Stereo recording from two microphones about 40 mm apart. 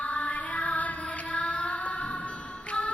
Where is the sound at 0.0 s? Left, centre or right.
Left.